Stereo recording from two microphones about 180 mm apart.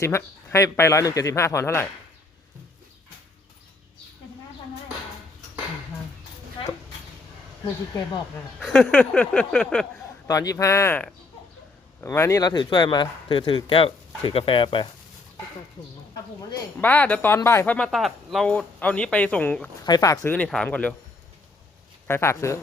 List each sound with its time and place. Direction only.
0.0 s speech: 15° left (ahead or behind)
8.5 s a sound: centre (ahead or behind)
10.2 s speech: 20° left (ahead or behind)
16.8 s speech: 10° left (ahead or behind)
19.8 s speech: 20° left (ahead or behind)
20.3 s speech: 5° left (ahead or behind)
22.0 s speech: 15° left (ahead or behind)